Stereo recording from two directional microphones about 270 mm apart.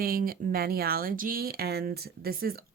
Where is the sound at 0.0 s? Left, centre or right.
Right.